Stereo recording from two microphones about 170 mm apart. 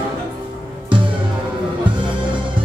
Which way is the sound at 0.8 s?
30° right (ahead or behind).